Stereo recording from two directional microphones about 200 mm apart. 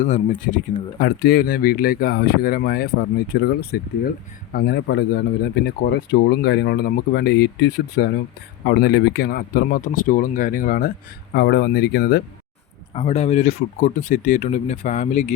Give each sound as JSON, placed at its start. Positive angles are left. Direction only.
{"t": 0.0, "sound": "speech", "side_deg": 40}
{"t": 12.9, "sound": "speech", "side_deg": 30}